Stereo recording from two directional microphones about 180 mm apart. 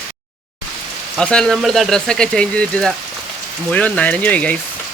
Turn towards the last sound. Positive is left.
turn(degrees=5)  # may be behind; listen again after turning